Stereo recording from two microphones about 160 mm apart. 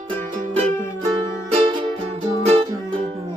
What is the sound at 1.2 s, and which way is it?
Music, 35° right (ahead or behind).